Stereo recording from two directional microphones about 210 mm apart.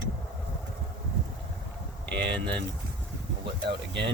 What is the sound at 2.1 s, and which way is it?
Speech, 55° right (ahead or behind).